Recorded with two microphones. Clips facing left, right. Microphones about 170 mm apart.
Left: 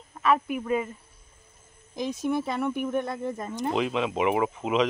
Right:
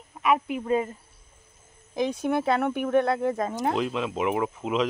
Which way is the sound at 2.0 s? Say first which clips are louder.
Right 2 dB; 60° right (ahead or behind).